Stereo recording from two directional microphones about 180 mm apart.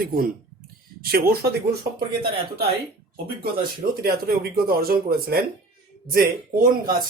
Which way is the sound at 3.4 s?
55° right (ahead or behind).